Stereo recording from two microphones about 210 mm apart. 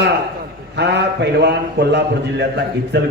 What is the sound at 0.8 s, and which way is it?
A man's voice, 55° right (ahead or behind).